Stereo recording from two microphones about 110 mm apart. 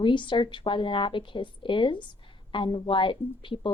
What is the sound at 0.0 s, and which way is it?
A woman's voice, 50° left (ahead or behind).